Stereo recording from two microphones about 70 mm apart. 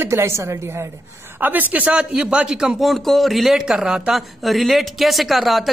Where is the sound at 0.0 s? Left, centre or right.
Right.